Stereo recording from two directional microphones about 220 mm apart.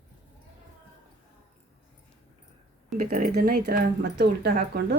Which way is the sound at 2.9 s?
40° right (ahead or behind).